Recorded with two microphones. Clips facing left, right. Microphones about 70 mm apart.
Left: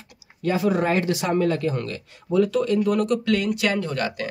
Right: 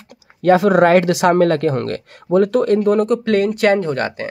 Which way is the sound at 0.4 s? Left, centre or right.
Right.